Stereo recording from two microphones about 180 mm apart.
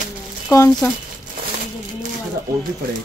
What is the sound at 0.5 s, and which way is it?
Speech, 20° left (ahead or behind).